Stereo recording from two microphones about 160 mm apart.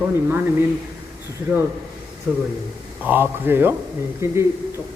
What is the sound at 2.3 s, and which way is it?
Speech, 15° right (ahead or behind).